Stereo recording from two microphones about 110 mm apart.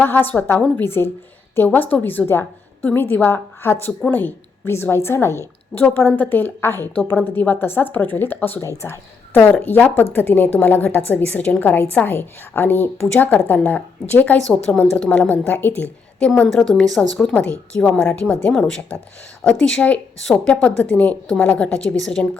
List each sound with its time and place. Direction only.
0.0 s a woman's voice: 15° left (ahead or behind)
8.6 s a woman's voice: 25° left (ahead or behind)
14.4 s a woman's voice: 5° left (ahead or behind)